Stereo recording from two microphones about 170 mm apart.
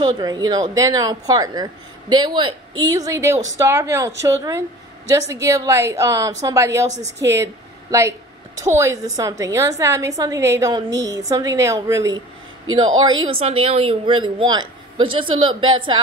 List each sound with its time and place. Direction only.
0.0 s a woman's voice: 25° right (ahead or behind)
3.1 s a woman's voice: 15° right (ahead or behind)
8.5 s a woman's voice: 15° right (ahead or behind)